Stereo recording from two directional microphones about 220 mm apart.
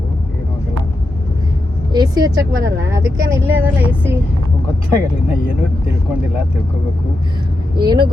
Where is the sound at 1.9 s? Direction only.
20° right (ahead or behind).